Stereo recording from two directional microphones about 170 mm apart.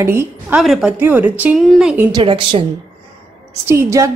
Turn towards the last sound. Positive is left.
turn(degrees=-15)  # may be behind; listen again after turning